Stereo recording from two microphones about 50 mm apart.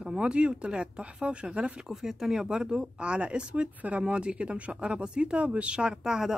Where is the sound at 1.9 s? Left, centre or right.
Centre.